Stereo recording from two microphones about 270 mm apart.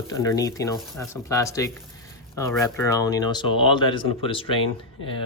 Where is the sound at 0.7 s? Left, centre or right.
Centre.